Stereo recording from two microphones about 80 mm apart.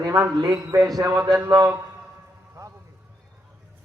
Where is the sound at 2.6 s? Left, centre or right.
Right.